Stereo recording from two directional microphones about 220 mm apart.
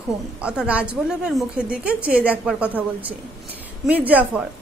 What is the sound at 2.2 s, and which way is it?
Speech, 5° right (ahead or behind).